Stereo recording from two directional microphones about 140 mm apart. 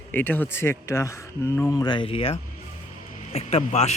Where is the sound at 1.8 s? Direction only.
35° left (ahead or behind).